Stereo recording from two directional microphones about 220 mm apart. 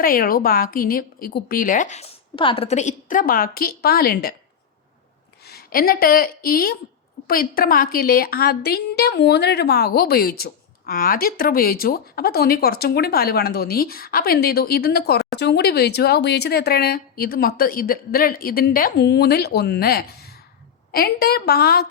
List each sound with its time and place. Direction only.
0.0 s a woman's voice: 40° left (ahead or behind)
5.5 s a woman's voice: 45° left (ahead or behind)